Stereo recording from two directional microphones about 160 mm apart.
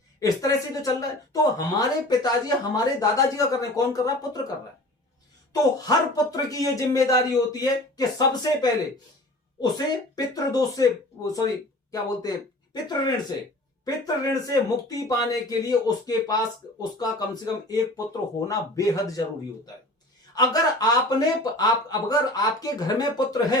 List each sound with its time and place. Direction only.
0.2 s speech: 20° left (ahead or behind)
5.7 s speech: 20° left (ahead or behind)
20.3 s speech: 25° left (ahead or behind)